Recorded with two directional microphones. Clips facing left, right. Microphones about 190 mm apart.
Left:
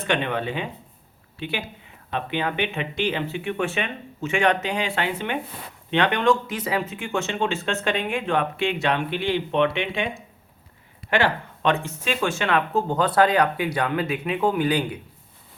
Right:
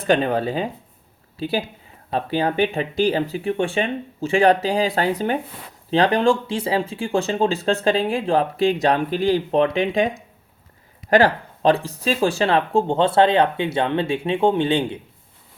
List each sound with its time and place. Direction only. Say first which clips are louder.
0.0 s speech: right 6 dB; 35° right (ahead or behind)
11.1 s speech: right 6 dB; 35° right (ahead or behind)